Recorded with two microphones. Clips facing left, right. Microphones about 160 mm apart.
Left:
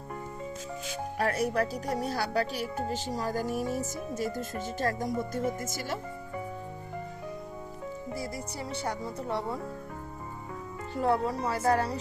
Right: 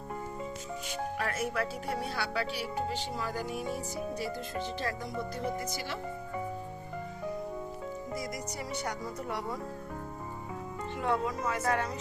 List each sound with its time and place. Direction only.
1.2 s speech: 40° left (ahead or behind)
8.7 s speech: 30° left (ahead or behind)
10.9 s speech: 35° left (ahead or behind)